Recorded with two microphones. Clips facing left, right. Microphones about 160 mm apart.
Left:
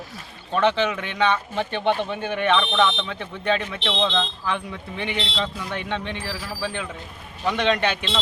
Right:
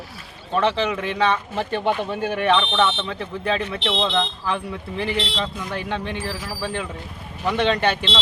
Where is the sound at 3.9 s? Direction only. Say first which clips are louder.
Right 1 dB; 10° right (ahead or behind).